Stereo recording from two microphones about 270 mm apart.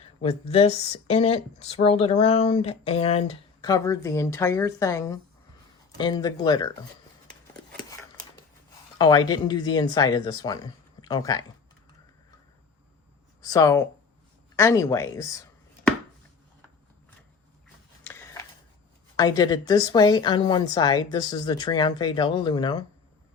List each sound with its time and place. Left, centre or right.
0.2 s speech: left
9.0 s speech: centre
13.4 s speech: centre
18.0 s a sound: centre
19.1 s speech: centre